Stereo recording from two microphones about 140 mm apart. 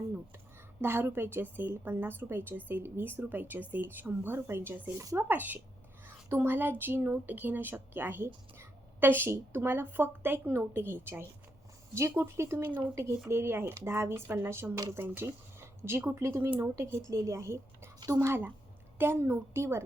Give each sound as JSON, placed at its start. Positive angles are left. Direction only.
{"t": 0.8, "sound": "a woman's voice", "side_deg": -15}